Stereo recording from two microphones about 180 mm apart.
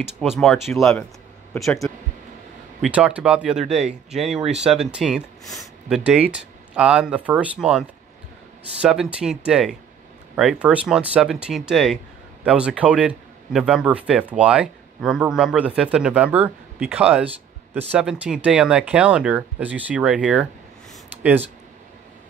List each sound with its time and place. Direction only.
0.2 s speech: 5° left (ahead or behind)
8.8 s speech: 5° right (ahead or behind)